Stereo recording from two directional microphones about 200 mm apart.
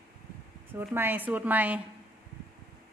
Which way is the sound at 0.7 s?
10° right (ahead or behind).